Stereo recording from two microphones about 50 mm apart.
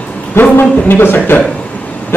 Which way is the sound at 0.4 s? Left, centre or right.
Left.